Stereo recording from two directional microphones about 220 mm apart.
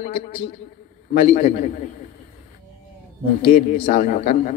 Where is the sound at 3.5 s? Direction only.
35° left (ahead or behind).